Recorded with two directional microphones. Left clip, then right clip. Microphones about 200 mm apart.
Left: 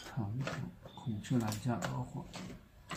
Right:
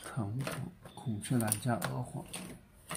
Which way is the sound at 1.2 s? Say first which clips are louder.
Right 2 dB; 45° right (ahead or behind).